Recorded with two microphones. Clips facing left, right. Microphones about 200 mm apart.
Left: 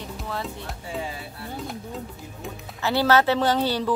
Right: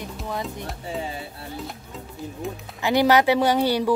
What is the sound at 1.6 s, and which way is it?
Music, centre (ahead or behind).